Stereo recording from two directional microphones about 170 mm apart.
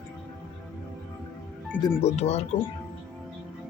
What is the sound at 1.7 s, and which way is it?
Speech, 10° left (ahead or behind).